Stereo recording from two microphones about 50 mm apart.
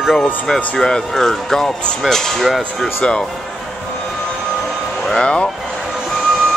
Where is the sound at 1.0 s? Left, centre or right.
Centre.